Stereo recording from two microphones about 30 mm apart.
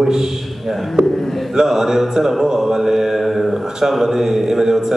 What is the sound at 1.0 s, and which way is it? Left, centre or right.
Speech, centre.